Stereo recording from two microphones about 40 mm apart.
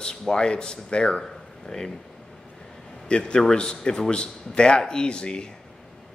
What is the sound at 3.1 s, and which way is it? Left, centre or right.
A man's voice, left.